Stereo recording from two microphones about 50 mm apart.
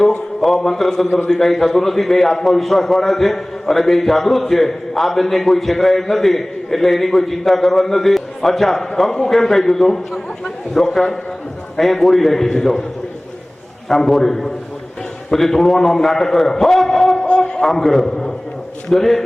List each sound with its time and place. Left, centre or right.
0.4 s a man's voice: centre
13.8 s a man's voice: centre
17.2 s a sound: left
17.6 s a man's voice: centre